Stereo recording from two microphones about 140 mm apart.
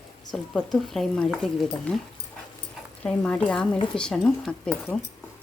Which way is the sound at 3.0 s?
10° left (ahead or behind).